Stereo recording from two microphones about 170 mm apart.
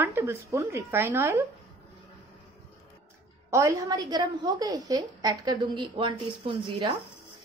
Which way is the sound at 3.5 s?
20° right (ahead or behind).